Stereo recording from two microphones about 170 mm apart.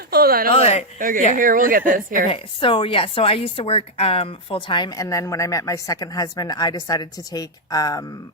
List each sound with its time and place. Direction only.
0.1 s a sound: 60° right (ahead or behind)
0.5 s speech: 40° left (ahead or behind)
0.9 s a woman's voice: 55° right (ahead or behind)
2.3 s speech: 30° left (ahead or behind)